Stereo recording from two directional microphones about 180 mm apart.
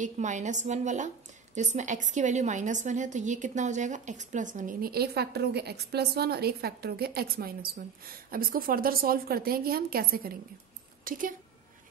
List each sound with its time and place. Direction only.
0.0 s a woman's voice: 40° right (ahead or behind)